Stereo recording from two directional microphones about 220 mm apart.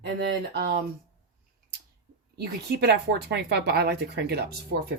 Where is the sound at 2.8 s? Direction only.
50° right (ahead or behind).